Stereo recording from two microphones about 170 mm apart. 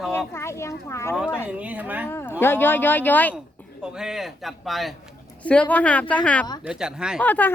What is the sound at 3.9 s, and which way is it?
A man's voice, 5° right (ahead or behind).